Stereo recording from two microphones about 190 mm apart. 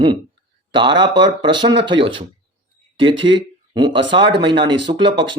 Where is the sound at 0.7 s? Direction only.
25° right (ahead or behind).